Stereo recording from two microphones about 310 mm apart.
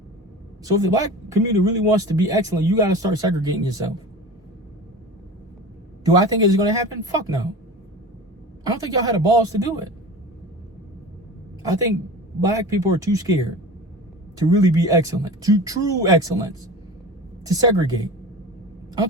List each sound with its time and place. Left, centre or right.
0.6 s a man's voice: centre
6.1 s a man's voice: centre
8.6 s a man's voice: centre
12.4 s a man's voice: centre